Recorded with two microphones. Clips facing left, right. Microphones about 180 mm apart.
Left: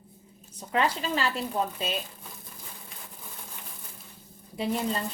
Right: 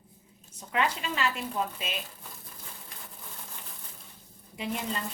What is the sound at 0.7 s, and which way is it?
A woman's voice, 35° left (ahead or behind).